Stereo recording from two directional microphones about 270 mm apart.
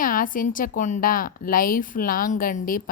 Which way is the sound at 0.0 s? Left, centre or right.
Left.